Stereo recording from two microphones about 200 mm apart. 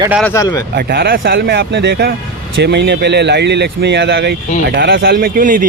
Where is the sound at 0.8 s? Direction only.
50° right (ahead or behind).